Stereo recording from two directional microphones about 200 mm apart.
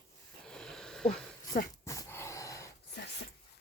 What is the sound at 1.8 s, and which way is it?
Dog, 15° left (ahead or behind).